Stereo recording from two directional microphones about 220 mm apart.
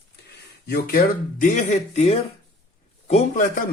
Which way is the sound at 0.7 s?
40° left (ahead or behind).